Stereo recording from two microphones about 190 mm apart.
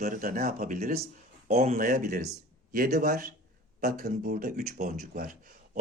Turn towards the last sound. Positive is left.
turn(degrees=-45)  # may be behind; listen again after turning